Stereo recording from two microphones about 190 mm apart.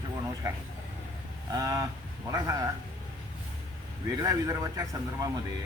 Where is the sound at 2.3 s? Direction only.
15° right (ahead or behind).